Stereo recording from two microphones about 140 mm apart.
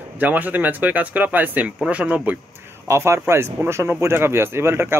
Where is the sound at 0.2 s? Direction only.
10° right (ahead or behind).